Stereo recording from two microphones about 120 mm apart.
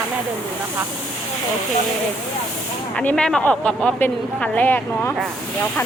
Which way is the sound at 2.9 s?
5° left (ahead or behind).